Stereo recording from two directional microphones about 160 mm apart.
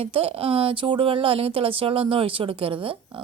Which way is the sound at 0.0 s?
35° right (ahead or behind).